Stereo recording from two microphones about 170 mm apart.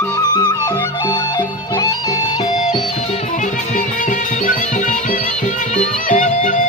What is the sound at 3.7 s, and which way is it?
Music, 50° left (ahead or behind).